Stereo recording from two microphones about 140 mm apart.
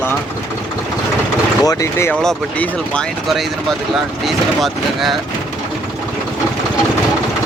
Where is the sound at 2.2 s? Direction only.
5° left (ahead or behind).